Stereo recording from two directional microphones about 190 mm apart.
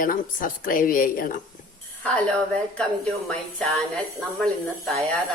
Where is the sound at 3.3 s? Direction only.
5° left (ahead or behind).